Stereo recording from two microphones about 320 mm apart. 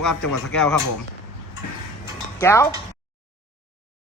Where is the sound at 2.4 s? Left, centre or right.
Centre.